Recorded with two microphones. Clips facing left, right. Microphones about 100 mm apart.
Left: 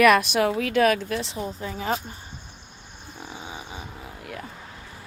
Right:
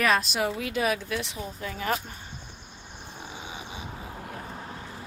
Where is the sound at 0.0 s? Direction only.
75° left (ahead or behind); by 2.0 s 25° left (ahead or behind).